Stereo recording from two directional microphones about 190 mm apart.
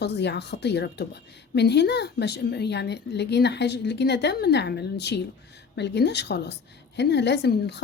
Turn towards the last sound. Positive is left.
turn(degrees=60)  # may be behind; listen again after turning